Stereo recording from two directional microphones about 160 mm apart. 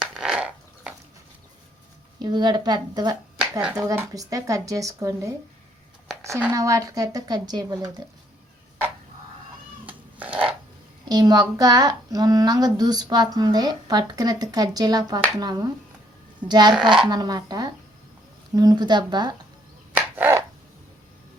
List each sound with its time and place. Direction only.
0.0 s fart: 5° right (ahead or behind)
2.1 s speech: 25° right (ahead or behind)
9.8 s cat: 10° right (ahead or behind)
11.1 s speech: 25° right (ahead or behind)
19.9 s finger snapping: 10° right (ahead or behind)